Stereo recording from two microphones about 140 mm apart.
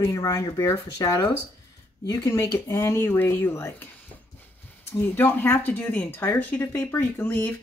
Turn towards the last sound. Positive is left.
turn(degrees=15)  # may be behind; listen again after turning